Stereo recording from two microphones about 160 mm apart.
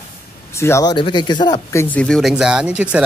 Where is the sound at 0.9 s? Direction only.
30° left (ahead or behind).